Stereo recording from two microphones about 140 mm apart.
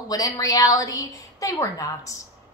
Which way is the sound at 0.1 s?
25° left (ahead or behind).